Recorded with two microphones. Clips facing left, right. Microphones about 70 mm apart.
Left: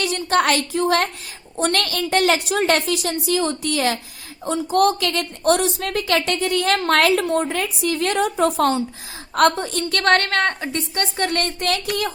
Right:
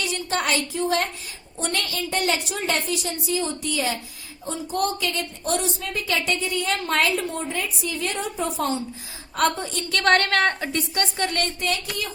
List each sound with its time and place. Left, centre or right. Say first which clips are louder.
0.0 s a woman's voice: left 7 dB; left
9.3 s a woman's voice: left 6 dB; left